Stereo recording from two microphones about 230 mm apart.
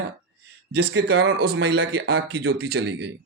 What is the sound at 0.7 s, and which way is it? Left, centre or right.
Speech, right.